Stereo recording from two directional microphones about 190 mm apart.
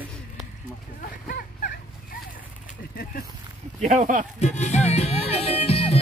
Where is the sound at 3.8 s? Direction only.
40° right (ahead or behind).